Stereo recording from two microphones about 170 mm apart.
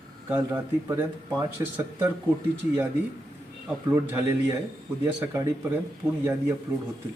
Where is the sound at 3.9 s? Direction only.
20° right (ahead or behind).